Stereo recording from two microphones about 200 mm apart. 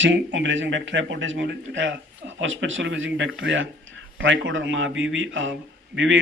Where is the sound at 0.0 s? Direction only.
65° right (ahead or behind).